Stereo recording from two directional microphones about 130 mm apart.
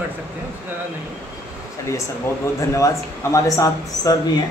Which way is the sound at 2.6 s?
20° left (ahead or behind).